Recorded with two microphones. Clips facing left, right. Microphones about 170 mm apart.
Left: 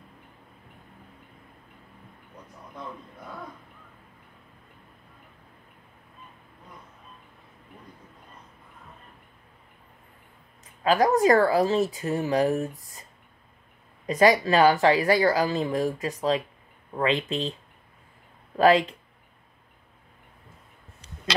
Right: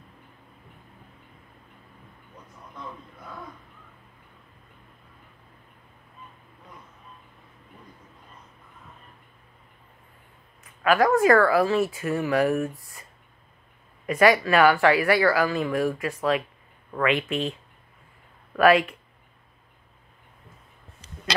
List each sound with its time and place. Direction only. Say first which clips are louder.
10.8 s speech: right 1 dB; 25° left (ahead or behind)
14.0 s speech: even; 20° left (ahead or behind)
18.6 s speech: right 1 dB; 25° left (ahead or behind)